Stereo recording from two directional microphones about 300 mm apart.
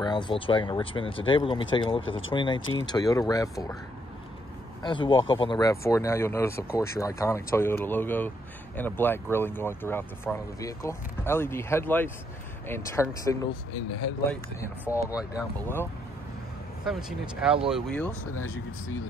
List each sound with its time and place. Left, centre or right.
0.0 s speech: centre
4.8 s speech: centre
16.8 s speech: centre